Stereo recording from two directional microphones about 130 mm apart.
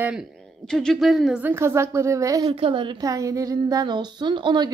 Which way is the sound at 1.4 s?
20° right (ahead or behind).